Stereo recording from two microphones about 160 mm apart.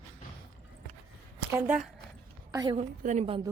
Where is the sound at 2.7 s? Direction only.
45° right (ahead or behind).